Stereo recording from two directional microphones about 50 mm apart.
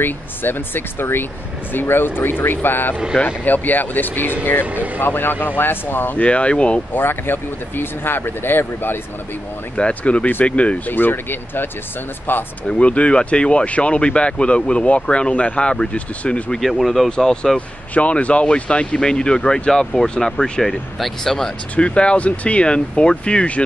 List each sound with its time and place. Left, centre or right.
0.0 s speech: left
6.1 s speech: left
6.9 s speech: left
9.8 s speech: left
10.9 s speech: left
12.6 s speech: left
16.5 s speech: centre
17.1 s speech: centre
17.6 s speech: left; by 21.5 s centre
21.7 s speech: left